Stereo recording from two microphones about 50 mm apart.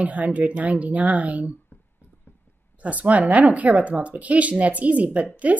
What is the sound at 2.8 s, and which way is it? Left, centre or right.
Speech, right.